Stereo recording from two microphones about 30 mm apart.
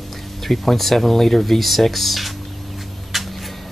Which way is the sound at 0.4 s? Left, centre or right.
Centre.